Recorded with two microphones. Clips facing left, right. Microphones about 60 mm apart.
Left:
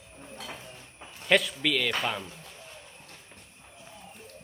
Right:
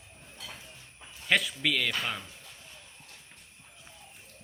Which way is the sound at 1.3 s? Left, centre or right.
Centre.